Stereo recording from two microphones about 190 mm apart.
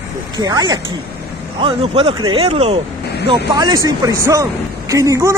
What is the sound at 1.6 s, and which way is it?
Speech, 30° right (ahead or behind).